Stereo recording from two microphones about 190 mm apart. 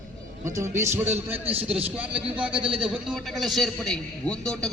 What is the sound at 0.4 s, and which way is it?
A man's voice, 15° right (ahead or behind).